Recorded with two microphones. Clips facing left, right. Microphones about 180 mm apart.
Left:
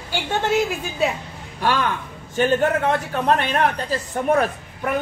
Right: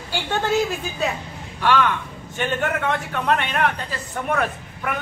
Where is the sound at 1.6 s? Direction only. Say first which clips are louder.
Right 2 dB; 40° left (ahead or behind).